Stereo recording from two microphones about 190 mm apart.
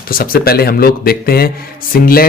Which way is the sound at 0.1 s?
50° left (ahead or behind).